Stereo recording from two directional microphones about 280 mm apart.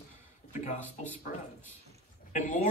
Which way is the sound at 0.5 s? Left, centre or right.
Left.